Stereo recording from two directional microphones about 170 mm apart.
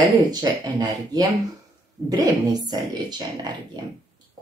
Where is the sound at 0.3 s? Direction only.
25° right (ahead or behind).